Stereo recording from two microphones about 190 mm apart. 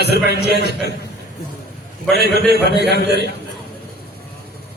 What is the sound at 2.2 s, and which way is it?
A man's voice, 60° right (ahead or behind).